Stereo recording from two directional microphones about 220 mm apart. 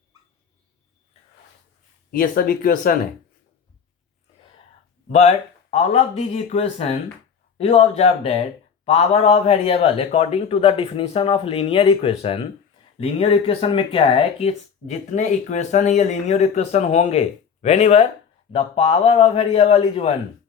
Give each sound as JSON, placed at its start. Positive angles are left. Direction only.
{"t": 2.0, "sound": "speech", "side_deg": 40}
{"t": 5.0, "sound": "speech", "side_deg": 30}